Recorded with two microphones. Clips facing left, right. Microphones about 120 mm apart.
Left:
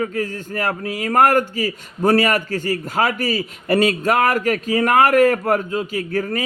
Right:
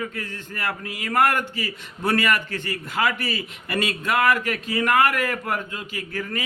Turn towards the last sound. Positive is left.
turn(degrees=45)  # may be behind; listen again after turning